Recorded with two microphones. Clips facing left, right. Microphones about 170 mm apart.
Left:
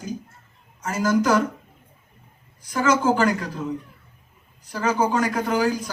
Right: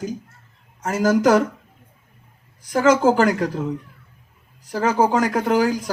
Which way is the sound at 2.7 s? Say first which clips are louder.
Right 4 dB; 70° right (ahead or behind).